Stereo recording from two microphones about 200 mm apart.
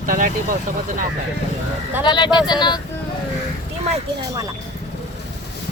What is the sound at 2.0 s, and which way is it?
Speech, 20° left (ahead or behind).